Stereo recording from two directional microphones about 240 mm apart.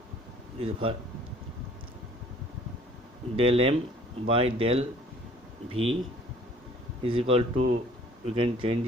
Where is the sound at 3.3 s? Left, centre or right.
Right.